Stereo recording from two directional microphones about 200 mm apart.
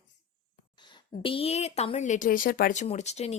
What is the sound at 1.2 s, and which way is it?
Speech, 30° left (ahead or behind).